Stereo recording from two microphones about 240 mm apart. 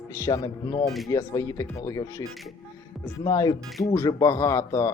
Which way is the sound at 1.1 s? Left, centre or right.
Centre.